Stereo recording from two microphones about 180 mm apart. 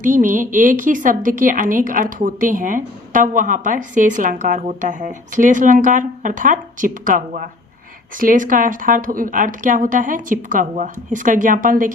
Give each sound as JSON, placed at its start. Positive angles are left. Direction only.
{"t": 0.0, "sound": "a woman's voice", "side_deg": -45}